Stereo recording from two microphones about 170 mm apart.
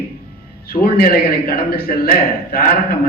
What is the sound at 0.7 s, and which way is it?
A man's voice, 60° left (ahead or behind).